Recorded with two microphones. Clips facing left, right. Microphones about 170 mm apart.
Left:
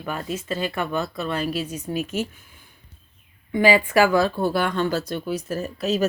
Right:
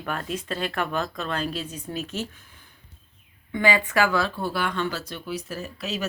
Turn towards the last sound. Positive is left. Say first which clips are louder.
# left 8 dB
turn(degrees=45)  # may be behind; listen again after turning